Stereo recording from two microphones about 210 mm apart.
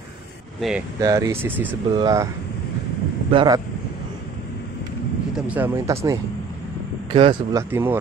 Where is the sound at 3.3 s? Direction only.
20° right (ahead or behind).